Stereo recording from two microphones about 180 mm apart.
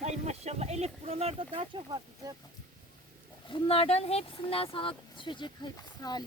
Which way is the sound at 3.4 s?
30° left (ahead or behind).